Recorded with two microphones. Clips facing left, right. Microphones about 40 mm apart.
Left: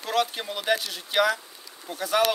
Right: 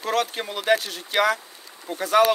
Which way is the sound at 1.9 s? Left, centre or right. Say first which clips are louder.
Right 4 dB; right.